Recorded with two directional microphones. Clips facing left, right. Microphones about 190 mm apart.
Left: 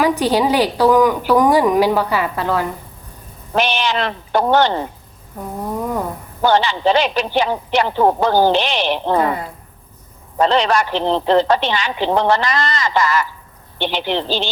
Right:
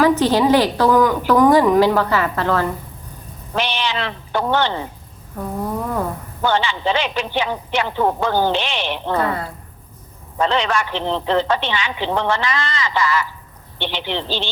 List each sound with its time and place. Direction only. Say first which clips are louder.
0.0 s a woman's voice: right 1 dB; 15° left (ahead or behind)
3.5 s a man's voice: left 4 dB; 45° left (ahead or behind)
6.4 s a man's voice: left 4 dB; 40° left (ahead or behind)
9.1 s a woman's voice: left 1 dB; 15° left (ahead or behind)
10.4 s a man's voice: left 4 dB; 35° left (ahead or behind)